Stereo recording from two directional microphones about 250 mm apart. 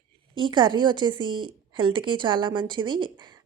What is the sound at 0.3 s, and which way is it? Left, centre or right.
A woman's voice, centre.